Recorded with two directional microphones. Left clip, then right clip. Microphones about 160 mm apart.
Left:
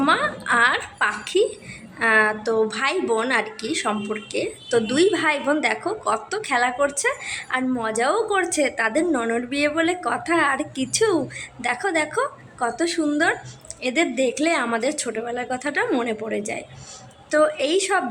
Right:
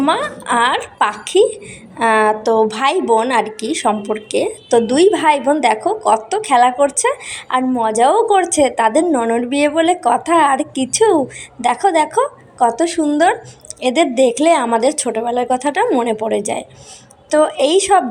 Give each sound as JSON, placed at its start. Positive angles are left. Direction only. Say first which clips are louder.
{"t": 0.0, "sound": "speech", "louder": "right 3 dB", "side_deg": -25}